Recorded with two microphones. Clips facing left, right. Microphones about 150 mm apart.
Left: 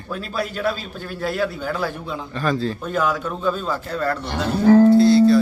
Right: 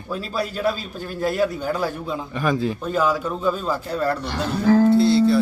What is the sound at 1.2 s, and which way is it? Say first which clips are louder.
Speech: right 2 dB; 15° right (ahead or behind).